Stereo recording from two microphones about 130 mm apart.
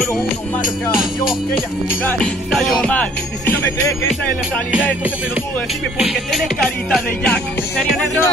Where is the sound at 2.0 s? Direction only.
5° left (ahead or behind).